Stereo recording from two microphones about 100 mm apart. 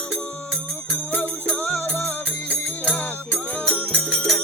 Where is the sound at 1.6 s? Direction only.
25° left (ahead or behind).